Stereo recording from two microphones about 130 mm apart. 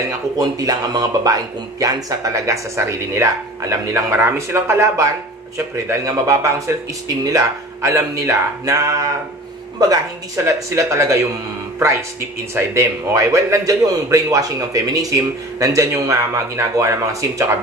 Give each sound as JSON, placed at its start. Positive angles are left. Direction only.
{"t": 0.4, "sound": "a man's voice", "side_deg": -30}
{"t": 12.5, "sound": "a man's voice", "side_deg": -25}